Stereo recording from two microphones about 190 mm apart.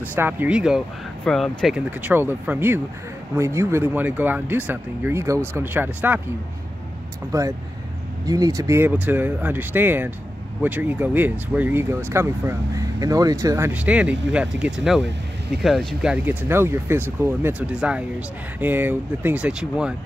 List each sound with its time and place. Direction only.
0.1 s speech: 10° right (ahead or behind)
7.3 s speech: 15° right (ahead or behind)